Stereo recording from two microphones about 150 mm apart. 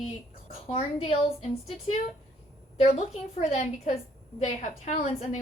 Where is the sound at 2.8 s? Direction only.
45° left (ahead or behind).